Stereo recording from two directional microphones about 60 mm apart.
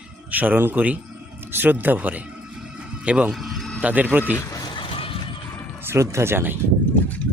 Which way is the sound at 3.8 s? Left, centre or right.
Right.